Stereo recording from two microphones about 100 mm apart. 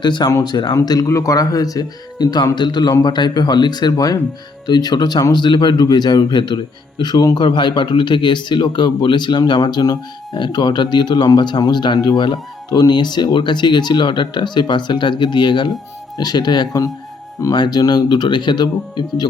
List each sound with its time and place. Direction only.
0.0 s speech: 45° left (ahead or behind)
1.0 s speech: 30° left (ahead or behind)